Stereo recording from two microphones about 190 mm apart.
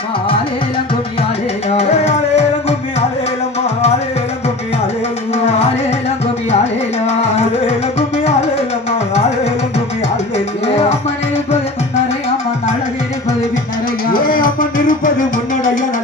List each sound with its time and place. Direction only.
1.7 s music: 35° left (ahead or behind)
5.3 s music: 35° left (ahead or behind)
7.1 s music: 35° left (ahead or behind)
9.1 s music: 35° left (ahead or behind)
14.1 s music: 50° left (ahead or behind)